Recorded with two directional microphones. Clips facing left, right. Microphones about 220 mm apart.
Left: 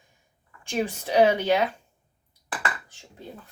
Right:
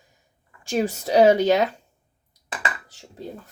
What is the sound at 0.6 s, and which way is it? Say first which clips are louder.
Speech: right 4 dB; 40° right (ahead or behind).